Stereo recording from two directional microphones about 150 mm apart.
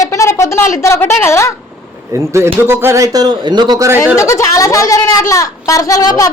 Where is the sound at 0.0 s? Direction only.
20° left (ahead or behind).